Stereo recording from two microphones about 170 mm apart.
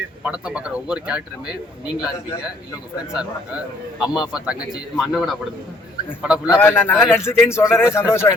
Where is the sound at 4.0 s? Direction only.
5° right (ahead or behind).